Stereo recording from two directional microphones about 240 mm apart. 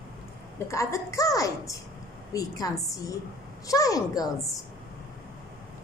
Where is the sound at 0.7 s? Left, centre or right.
Centre.